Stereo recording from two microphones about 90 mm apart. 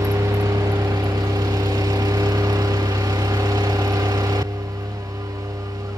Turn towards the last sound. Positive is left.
turn(degrees=-45)  # may be behind; listen again after turning